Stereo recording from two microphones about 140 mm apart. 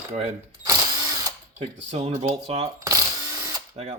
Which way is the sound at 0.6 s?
25° right (ahead or behind).